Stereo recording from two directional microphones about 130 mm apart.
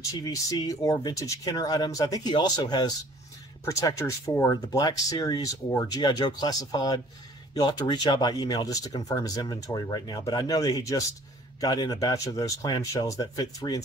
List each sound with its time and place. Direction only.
0.1 s speech: 25° left (ahead or behind)